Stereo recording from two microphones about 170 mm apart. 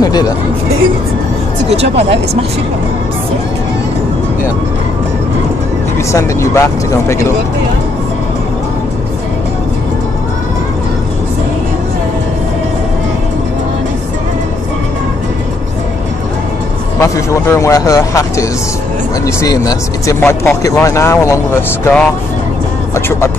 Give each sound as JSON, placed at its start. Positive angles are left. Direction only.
{"t": 0.0, "sound": "speech", "side_deg": 25}
{"t": 6.1, "sound": "speech", "side_deg": 15}
{"t": 17.0, "sound": "speech", "side_deg": 20}